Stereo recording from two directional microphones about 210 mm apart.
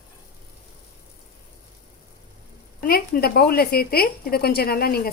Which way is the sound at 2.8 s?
45° left (ahead or behind).